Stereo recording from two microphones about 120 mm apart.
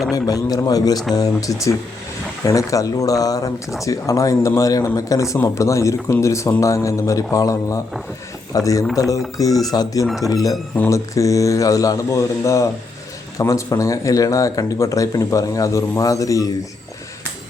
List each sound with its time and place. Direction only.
0.1 s speech: 30° left (ahead or behind)